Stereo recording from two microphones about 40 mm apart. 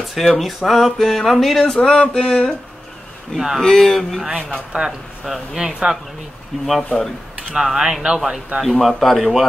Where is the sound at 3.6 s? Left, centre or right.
Centre.